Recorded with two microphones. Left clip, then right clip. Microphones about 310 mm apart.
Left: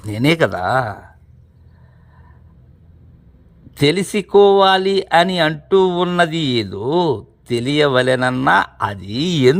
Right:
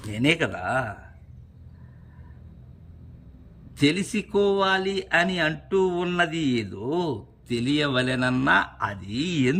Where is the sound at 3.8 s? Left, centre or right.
Centre.